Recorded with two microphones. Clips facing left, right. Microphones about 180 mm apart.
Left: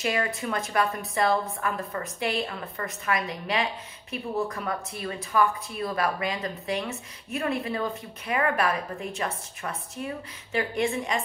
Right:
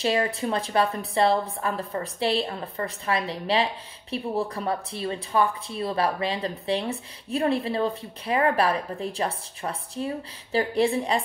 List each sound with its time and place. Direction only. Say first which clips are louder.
0.0 s speech: right 4 dB; 30° right (ahead or behind)